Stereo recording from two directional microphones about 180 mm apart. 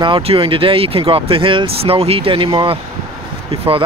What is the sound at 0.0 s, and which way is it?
Speech, 30° right (ahead or behind).